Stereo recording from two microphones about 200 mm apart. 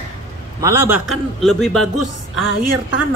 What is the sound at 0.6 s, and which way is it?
Speech, 15° right (ahead or behind).